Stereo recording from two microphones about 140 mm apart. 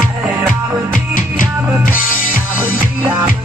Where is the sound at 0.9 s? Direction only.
75° left (ahead or behind).